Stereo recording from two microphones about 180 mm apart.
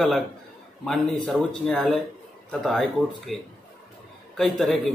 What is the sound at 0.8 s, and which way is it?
Speech, 5° left (ahead or behind).